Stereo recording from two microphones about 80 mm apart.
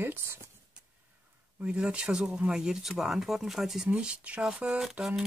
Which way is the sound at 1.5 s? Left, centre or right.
Centre.